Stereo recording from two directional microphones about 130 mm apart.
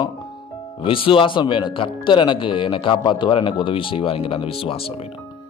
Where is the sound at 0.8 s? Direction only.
45° left (ahead or behind).